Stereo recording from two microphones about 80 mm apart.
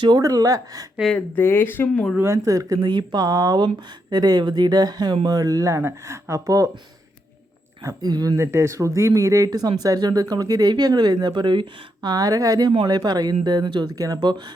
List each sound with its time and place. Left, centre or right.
0.2 s speech: right
1.4 s speech: left
2.2 s speech: right
2.8 s speech: right
8.0 s speech: right
8.4 s speech: right
12.0 s speech: right